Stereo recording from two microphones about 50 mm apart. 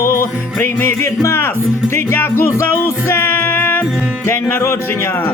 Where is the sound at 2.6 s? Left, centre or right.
Left.